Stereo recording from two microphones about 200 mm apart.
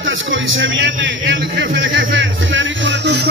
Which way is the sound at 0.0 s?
70° right (ahead or behind).